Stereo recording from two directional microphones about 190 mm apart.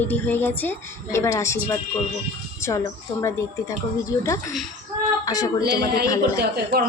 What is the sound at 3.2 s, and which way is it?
A woman's voice, 15° left (ahead or behind).